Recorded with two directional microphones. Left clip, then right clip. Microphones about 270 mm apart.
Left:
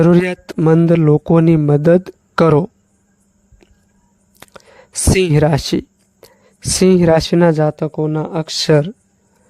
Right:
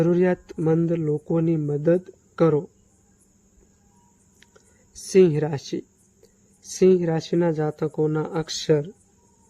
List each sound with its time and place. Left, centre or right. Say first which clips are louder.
0.0 s speech: left 7 dB; left
4.4 s a sound: left 17 dB; left
5.3 s speech: left 12 dB; left
8.6 s speech: left 8 dB; left